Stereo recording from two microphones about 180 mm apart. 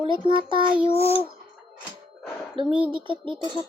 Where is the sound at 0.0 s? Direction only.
25° right (ahead or behind).